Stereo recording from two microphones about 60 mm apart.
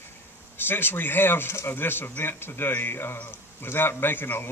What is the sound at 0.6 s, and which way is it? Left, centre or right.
Speech, left.